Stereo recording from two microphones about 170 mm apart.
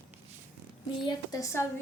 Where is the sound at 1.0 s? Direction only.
20° left (ahead or behind).